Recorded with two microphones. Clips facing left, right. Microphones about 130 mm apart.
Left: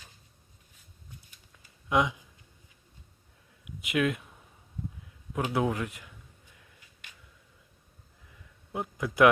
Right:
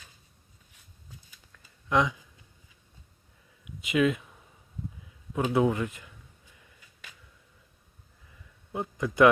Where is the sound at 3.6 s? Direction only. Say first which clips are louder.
Right 3 dB; centre (ahead or behind).